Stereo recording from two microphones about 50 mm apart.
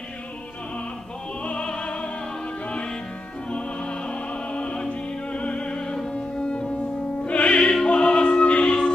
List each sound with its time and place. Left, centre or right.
1.4 s opera: left
3.4 s opera: left
7.2 s music: left